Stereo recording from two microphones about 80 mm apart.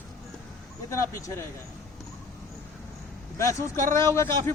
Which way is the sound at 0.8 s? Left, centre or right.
Left.